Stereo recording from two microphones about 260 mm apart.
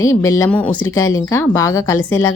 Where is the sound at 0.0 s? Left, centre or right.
Centre.